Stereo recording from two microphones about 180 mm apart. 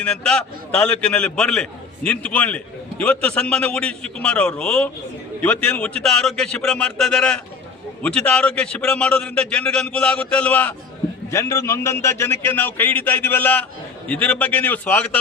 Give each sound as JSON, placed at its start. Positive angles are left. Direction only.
{"t": 0.0, "sound": "a man's voice", "side_deg": 5}